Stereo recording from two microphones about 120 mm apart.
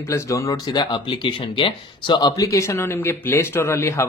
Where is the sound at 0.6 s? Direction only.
40° left (ahead or behind).